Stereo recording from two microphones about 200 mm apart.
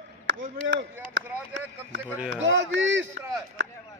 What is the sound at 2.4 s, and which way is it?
Speech, 70° right (ahead or behind).